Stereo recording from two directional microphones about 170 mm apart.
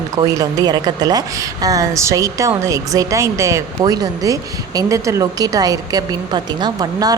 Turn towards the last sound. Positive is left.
turn(degrees=-25)  # may be behind; listen again after turning